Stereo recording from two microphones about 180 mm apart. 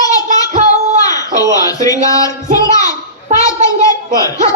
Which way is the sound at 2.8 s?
40° right (ahead or behind).